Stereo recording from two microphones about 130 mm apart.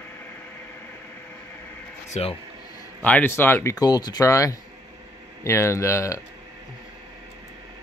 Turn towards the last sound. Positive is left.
turn(degrees=20)  # may be behind; listen again after turning